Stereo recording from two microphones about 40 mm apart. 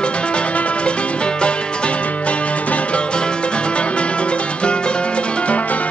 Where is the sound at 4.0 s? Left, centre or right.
Left.